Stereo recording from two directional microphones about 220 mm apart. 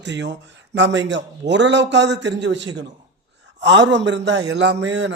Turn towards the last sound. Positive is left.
turn(degrees=-55)  # may be behind; listen again after turning